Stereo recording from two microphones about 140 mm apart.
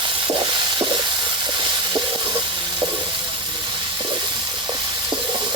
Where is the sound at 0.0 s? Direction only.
35° right (ahead or behind).